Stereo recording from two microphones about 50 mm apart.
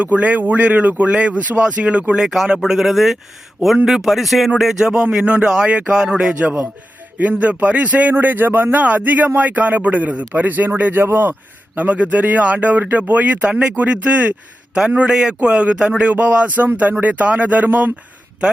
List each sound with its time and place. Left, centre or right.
0.0 s speech: right
1.1 s speech: centre
2.2 s a man's voice: centre
5.1 s a man's voice: right
7.2 s speech: right
11.0 s a man's voice: right
11.8 s a man's voice: right
16.1 s speech: right